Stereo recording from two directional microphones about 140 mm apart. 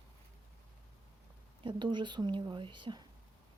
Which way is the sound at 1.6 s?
35° right (ahead or behind).